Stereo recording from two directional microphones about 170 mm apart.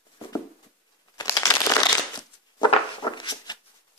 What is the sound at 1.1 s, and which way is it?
Shuffling cards, 20° left (ahead or behind).